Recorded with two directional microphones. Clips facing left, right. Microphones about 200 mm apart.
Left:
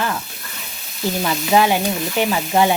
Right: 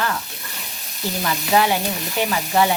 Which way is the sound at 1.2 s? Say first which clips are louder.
Left 2 dB; 15° left (ahead or behind).